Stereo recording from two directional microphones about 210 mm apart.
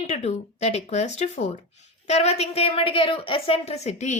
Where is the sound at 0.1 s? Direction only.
30° left (ahead or behind).